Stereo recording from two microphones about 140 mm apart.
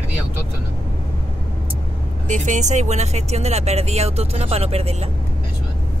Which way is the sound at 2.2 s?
60° right (ahead or behind).